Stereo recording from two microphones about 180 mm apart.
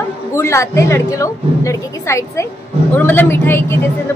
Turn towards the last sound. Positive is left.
turn(degrees=10)  # may be behind; listen again after turning